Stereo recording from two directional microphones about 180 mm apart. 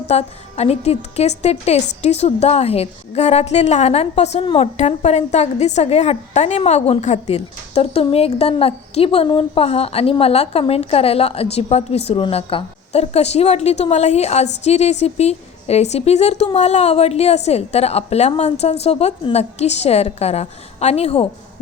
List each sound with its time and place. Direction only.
0.1 s a woman's voice: 35° left (ahead or behind)